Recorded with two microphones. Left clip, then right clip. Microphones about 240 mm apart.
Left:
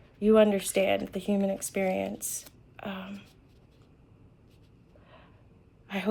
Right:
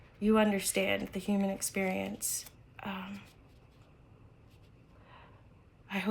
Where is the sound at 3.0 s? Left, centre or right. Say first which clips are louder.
Left 2 dB; centre.